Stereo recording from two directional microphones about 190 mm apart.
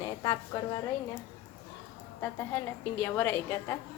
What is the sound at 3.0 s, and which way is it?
Speech, 10° left (ahead or behind).